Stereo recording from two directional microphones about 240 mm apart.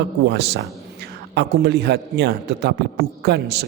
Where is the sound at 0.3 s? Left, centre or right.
Right.